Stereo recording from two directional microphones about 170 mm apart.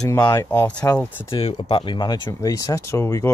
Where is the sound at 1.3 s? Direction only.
30° left (ahead or behind).